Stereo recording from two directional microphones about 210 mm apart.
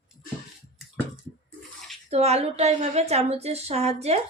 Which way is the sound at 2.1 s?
30° right (ahead or behind).